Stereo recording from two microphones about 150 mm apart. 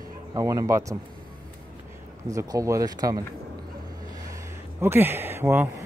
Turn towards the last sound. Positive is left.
turn(degrees=-15)  # may be behind; listen again after turning